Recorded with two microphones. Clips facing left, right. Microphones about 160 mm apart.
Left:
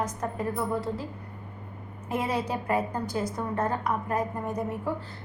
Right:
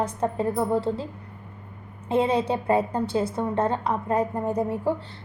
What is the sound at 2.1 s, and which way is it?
A woman's voice, 30° right (ahead or behind).